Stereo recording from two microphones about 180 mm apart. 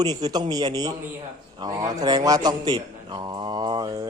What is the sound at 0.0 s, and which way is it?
A man's voice, 20° right (ahead or behind).